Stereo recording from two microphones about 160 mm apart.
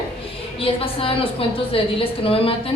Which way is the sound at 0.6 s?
35° left (ahead or behind).